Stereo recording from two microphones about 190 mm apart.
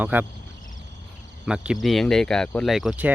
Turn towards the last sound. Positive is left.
turn(degrees=-5)  # may be behind; listen again after turning